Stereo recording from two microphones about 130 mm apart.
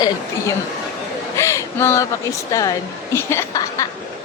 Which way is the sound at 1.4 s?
20° left (ahead or behind).